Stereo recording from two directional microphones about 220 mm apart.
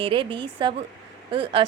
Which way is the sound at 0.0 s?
25° right (ahead or behind).